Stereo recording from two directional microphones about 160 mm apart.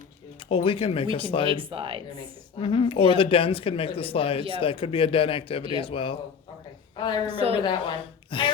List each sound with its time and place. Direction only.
0.4 s speech: 35° left (ahead or behind)
1.5 s speech: 35° right (ahead or behind)
2.6 s a woman's voice: 30° left (ahead or behind)
7.3 s speech: 35° right (ahead or behind)
7.6 s speech: 30° left (ahead or behind)